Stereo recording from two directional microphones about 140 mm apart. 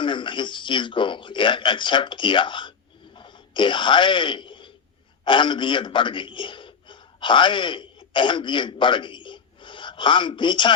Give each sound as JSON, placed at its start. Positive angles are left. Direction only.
{"t": 0.0, "sound": "speech", "side_deg": 35}
{"t": 3.2, "sound": "wail", "side_deg": 35}
{"t": 5.2, "sound": "a man's voice", "side_deg": 35}